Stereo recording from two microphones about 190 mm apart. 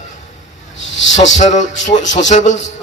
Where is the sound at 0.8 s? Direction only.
75° left (ahead or behind).